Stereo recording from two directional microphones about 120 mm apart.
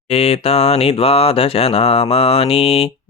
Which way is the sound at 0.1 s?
55° left (ahead or behind).